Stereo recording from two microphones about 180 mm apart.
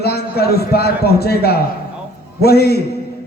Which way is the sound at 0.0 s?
60° left (ahead or behind).